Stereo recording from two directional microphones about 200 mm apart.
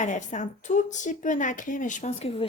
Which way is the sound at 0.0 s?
40° left (ahead or behind).